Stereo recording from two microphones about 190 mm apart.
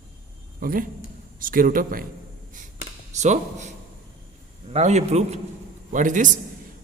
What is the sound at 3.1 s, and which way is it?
Speech, 35° right (ahead or behind).